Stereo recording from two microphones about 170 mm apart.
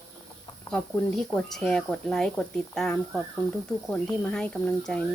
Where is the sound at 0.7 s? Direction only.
5° left (ahead or behind).